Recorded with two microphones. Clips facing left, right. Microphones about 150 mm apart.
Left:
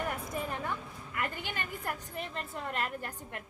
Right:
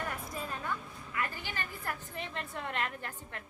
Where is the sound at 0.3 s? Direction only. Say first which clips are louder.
Left 3 dB; 15° left (ahead or behind).